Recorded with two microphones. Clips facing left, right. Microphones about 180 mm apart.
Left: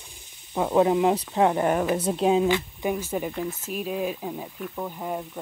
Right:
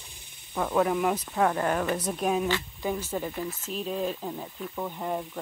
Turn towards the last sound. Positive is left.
turn(degrees=5)  # may be behind; listen again after turning